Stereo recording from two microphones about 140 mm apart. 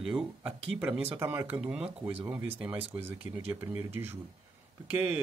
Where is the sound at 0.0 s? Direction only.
5° right (ahead or behind).